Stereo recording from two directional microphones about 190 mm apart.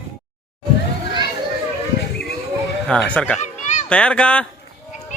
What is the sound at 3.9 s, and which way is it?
Speech, 5° left (ahead or behind).